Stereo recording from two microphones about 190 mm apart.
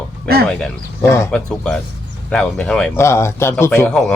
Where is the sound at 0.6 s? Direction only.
15° left (ahead or behind).